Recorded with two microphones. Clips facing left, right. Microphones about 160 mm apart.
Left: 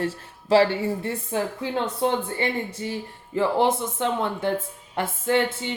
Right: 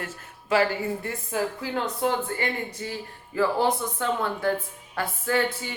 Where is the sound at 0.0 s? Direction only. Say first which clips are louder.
Left 9 dB; 30° left (ahead or behind).